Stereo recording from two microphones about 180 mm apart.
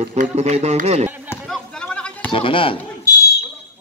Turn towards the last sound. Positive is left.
turn(degrees=20)  # may be behind; listen again after turning